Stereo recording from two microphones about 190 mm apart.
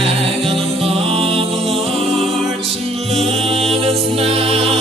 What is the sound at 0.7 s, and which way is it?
Music, 30° right (ahead or behind).